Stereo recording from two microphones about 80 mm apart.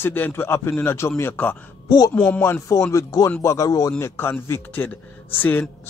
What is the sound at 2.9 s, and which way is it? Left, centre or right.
Speech, left.